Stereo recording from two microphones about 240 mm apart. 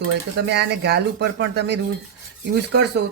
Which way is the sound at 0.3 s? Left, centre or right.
Right.